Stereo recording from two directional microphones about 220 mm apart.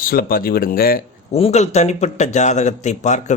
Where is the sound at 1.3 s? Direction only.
25° left (ahead or behind).